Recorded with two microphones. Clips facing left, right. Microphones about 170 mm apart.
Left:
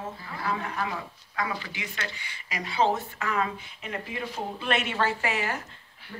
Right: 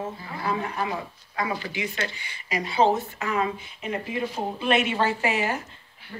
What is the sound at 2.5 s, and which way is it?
Speech, 30° right (ahead or behind).